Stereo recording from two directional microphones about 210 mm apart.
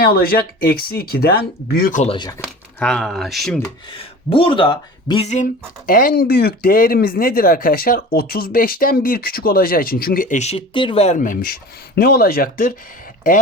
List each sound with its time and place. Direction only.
0.0 s speech: 45° left (ahead or behind)
2.7 s speech: 5° left (ahead or behind)
3.9 s speech: 25° left (ahead or behind); by 12.7 s 40° left (ahead or behind)